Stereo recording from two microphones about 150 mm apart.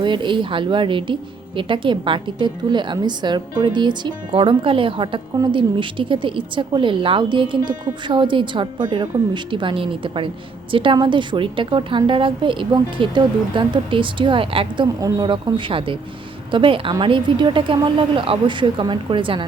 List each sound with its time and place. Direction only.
0.0 s speech: 30° right (ahead or behind)
15.0 s speech: 25° right (ahead or behind)